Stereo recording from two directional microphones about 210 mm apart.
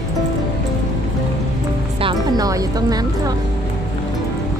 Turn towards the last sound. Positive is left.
turn(degrees=-15)  # may be behind; listen again after turning